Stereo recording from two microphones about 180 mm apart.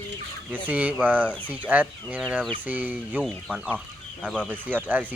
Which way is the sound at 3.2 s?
Centre (ahead or behind).